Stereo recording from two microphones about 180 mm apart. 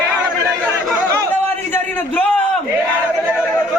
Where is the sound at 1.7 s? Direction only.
10° left (ahead or behind).